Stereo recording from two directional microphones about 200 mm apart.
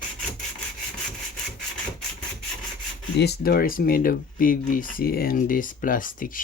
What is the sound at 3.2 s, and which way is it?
Speech, 50° left (ahead or behind).